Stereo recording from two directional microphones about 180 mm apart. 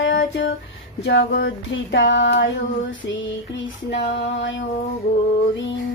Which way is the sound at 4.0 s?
80° left.